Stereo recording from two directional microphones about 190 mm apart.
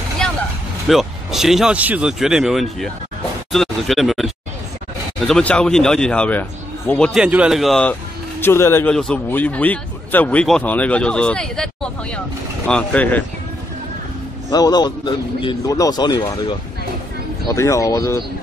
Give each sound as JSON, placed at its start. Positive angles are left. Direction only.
{"t": 0.8, "sound": "speech", "side_deg": 0}
{"t": 8.4, "sound": "speech", "side_deg": 15}
{"t": 14.5, "sound": "speech", "side_deg": 20}